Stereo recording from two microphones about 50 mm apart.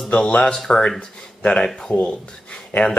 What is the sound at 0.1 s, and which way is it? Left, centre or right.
Speech, left.